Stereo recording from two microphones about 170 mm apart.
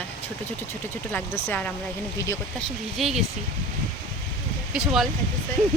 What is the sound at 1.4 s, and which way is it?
Speech, 10° left (ahead or behind).